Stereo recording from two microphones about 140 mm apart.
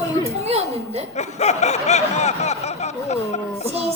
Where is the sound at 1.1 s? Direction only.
55° left (ahead or behind).